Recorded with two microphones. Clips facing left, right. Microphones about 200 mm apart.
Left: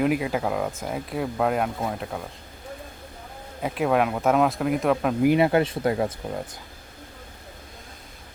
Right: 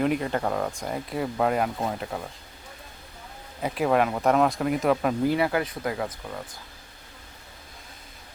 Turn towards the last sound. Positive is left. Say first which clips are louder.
# left 5 dB
turn(degrees=30)  # may be behind; listen again after turning